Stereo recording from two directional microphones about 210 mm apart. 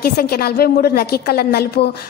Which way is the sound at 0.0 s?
45° left (ahead or behind).